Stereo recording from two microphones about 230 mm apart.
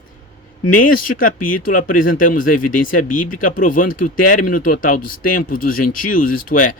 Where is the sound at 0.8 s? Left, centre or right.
Left.